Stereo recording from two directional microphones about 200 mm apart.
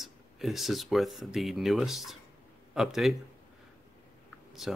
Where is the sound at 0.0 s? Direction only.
Centre (ahead or behind).